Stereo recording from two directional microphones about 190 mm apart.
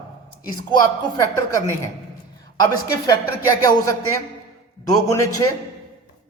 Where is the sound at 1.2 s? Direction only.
15° left (ahead or behind).